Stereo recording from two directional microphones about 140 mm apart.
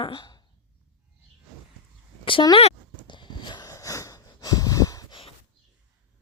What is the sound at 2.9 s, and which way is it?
Snort, 35° left (ahead or behind).